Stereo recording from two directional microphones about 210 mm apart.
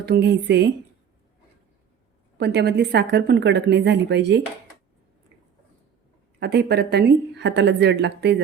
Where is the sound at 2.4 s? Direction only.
55° right (ahead or behind).